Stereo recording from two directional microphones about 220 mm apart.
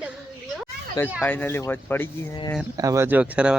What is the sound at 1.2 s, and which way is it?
Speech, 10° left (ahead or behind).